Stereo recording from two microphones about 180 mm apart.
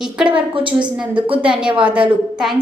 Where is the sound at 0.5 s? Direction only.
30° right (ahead or behind).